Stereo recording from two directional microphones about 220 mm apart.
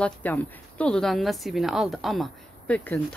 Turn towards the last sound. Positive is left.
turn(degrees=5)  # may be behind; listen again after turning